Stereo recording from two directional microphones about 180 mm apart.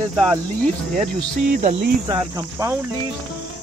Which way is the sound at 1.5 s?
45° right (ahead or behind).